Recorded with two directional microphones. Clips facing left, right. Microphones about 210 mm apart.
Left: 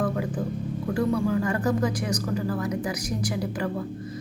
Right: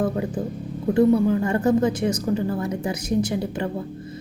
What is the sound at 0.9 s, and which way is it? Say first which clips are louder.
A woman's voice: right 7 dB; 25° right (ahead or behind).